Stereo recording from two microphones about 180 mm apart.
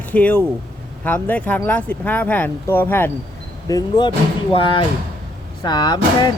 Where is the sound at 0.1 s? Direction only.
10° left (ahead or behind).